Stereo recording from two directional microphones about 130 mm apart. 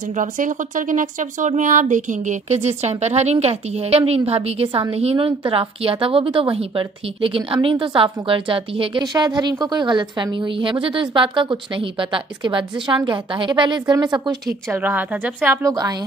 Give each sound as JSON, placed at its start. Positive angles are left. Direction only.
{"t": 0.1, "sound": "a woman's voice", "side_deg": -80}
{"t": 14.7, "sound": "a woman's voice", "side_deg": -15}